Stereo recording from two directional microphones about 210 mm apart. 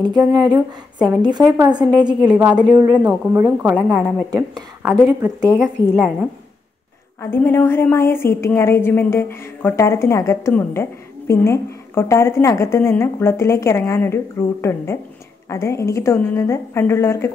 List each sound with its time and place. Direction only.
0.0 s a woman's voice: 20° right (ahead or behind)
3.3 s speech: 10° right (ahead or behind)
7.2 s a woman's voice: 10° left (ahead or behind)